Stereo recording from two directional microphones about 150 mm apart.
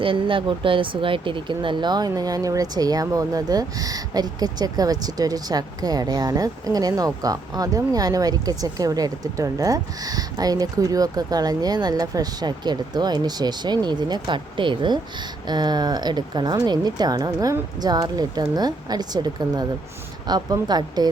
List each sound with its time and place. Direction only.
0.0 s speech: 35° right (ahead or behind)